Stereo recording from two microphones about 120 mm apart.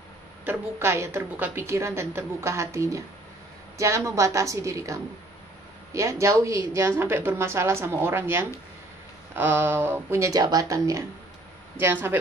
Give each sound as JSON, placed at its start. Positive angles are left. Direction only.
{"t": 0.5, "sound": "a woman's voice", "side_deg": -20}
{"t": 11.8, "sound": "speech", "side_deg": -15}